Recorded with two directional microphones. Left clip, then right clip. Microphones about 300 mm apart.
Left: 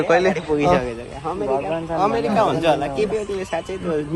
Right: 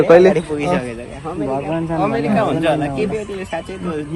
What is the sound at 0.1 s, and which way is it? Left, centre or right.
Speech, centre.